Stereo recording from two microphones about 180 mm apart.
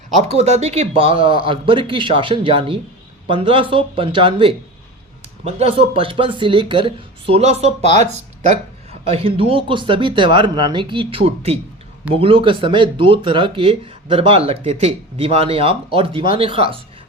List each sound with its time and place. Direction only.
0.2 s speech: 35° right (ahead or behind)